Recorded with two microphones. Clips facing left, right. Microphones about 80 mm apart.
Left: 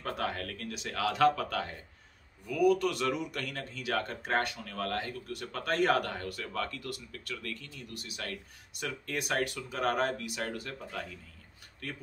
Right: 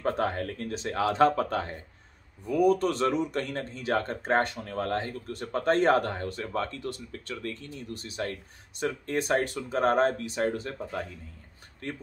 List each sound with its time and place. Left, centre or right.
0.0 s speech: right